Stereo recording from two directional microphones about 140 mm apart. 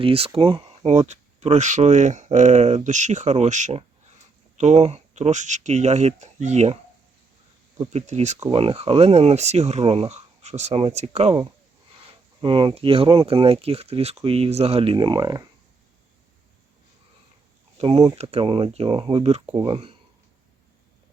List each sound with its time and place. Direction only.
0.0 s speech: 40° right (ahead or behind)
7.9 s speech: 55° right (ahead or behind)
8.4 s speech: 40° right (ahead or behind)
12.0 s speech: 40° right (ahead or behind)
17.7 s speech: 50° right (ahead or behind)
19.5 s speech: 35° right (ahead or behind)